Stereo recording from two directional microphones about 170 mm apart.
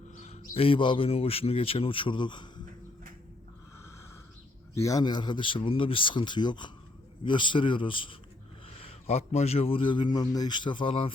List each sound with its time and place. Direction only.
0.2 s a man's voice: 40° left (ahead or behind)
4.7 s a man's voice: 20° left (ahead or behind)